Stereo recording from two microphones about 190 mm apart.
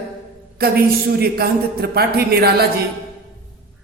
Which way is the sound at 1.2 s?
55° right (ahead or behind).